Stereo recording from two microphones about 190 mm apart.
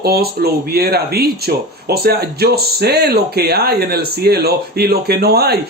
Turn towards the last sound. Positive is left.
turn(degrees=-55)  # may be behind; listen again after turning